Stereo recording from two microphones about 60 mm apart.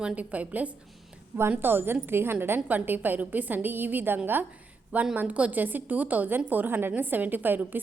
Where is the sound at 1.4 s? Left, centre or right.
Right.